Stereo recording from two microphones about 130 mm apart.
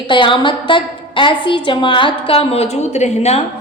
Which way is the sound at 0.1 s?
40° left (ahead or behind).